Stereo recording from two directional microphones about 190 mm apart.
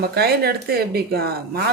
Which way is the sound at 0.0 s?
55° right (ahead or behind).